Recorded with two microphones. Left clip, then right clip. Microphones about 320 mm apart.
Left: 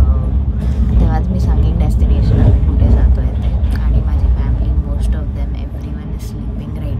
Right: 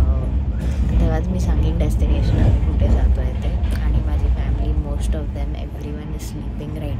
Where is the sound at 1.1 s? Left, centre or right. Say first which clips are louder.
Left 3 dB; centre.